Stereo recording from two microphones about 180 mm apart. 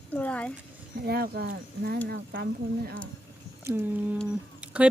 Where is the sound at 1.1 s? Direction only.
60° right (ahead or behind).